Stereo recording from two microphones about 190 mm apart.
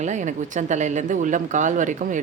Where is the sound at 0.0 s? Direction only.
40° right (ahead or behind).